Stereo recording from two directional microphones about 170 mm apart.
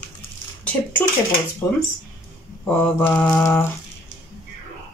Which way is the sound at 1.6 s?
15° left (ahead or behind).